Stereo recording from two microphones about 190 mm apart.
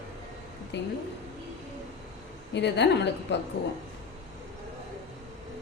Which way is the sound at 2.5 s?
65° left (ahead or behind).